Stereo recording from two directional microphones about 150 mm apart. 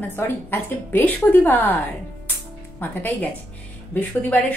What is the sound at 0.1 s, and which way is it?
Speech, 15° left (ahead or behind).